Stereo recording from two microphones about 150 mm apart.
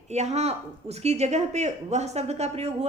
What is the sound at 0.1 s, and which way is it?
A woman's voice, 50° right (ahead or behind).